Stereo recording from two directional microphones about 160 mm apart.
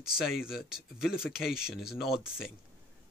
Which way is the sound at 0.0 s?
Centre (ahead or behind).